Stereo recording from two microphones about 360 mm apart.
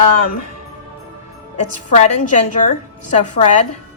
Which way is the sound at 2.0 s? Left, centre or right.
Centre.